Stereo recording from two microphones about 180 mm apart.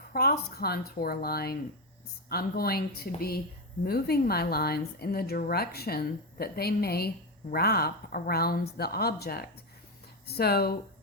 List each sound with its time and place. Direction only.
0.1 s speech: 60° left (ahead or behind)